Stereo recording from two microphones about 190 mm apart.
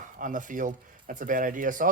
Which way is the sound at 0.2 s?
45° right (ahead or behind).